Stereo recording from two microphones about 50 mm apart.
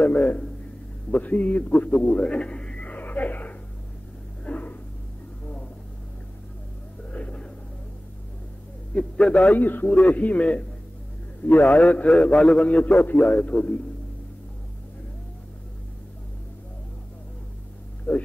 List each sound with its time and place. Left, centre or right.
0.0 s a man's voice: left
4.5 s dog: left
7.1 s a sound: left
8.9 s a man's voice: centre
9.6 s a man's voice: left
11.6 s a man's voice: left
12.2 s a man's voice: centre
12.6 s a man's voice: left
18.1 s a man's voice: left